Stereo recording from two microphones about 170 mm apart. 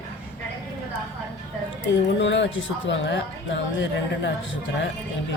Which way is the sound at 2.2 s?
90° left.